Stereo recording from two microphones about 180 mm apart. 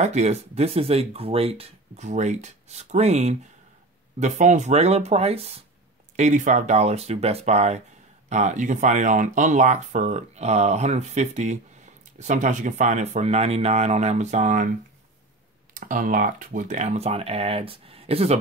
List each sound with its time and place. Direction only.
0.0 s speech: 40° right (ahead or behind)
15.7 s speech: 50° right (ahead or behind)